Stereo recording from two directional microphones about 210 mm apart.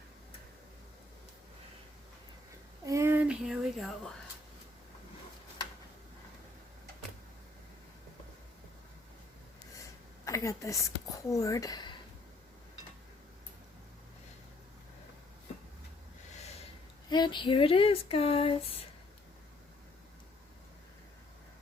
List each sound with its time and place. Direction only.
2.8 s speech: 15° right (ahead or behind)
10.2 s speech: 15° left (ahead or behind)
17.1 s a sound: 20° left (ahead or behind)